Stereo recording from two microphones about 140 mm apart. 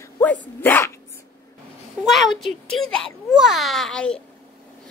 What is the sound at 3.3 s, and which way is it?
Babbling, 5° right (ahead or behind).